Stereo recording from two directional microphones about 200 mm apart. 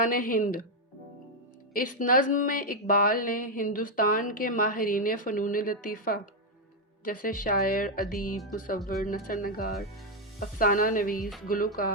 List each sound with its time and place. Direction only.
0.0 s speech: 45° left (ahead or behind)
1.7 s speech: 45° left (ahead or behind)